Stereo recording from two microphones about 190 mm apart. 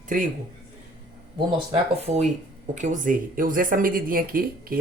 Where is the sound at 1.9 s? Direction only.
35° right (ahead or behind).